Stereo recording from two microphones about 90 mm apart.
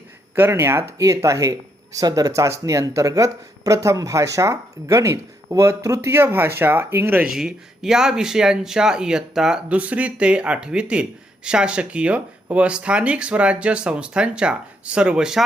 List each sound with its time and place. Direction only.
0.3 s speech: 30° right (ahead or behind)
7.2 s speech: 5° right (ahead or behind)